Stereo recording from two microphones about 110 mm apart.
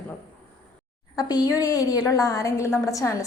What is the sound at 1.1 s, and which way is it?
A woman's voice, 35° left (ahead or behind).